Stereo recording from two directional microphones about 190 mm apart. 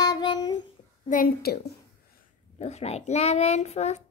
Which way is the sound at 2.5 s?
35° left (ahead or behind).